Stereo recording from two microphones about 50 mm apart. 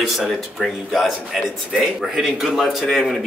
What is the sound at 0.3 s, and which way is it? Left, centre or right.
Speech, centre.